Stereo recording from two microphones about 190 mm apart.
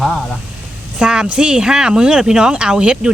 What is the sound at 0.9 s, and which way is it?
Speech, 5° right (ahead or behind).